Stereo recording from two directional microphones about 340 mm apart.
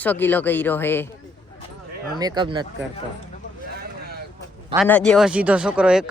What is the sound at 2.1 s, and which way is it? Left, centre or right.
Speech, centre.